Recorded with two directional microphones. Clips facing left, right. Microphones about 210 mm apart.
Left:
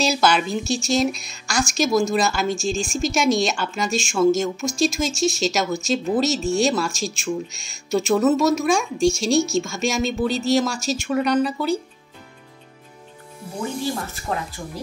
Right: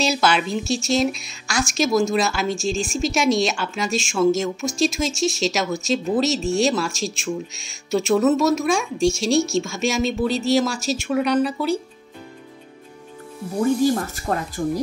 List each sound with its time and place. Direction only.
0.0 s speech: centre (ahead or behind)
14.3 s speech: 50° right (ahead or behind)